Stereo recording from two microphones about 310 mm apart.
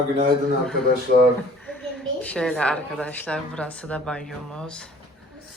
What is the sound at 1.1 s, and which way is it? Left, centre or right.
Speech, right.